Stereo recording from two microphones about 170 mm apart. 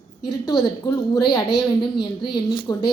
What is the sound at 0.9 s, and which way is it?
A woman's voice, 25° left (ahead or behind).